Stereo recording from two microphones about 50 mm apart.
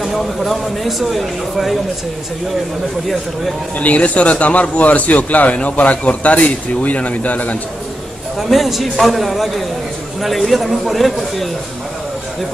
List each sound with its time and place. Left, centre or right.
0.0 s speech: centre
3.7 s speech: left
8.4 s speech: centre